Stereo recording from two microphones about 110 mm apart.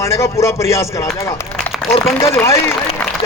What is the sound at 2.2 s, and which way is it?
Speech, 25° left (ahead or behind).